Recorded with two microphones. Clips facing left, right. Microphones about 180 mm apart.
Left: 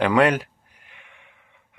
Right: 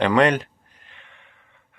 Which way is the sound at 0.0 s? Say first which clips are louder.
Even; 5° left (ahead or behind).